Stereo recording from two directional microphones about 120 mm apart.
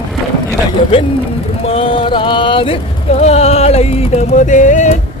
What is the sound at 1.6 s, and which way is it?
Music, 50° left (ahead or behind).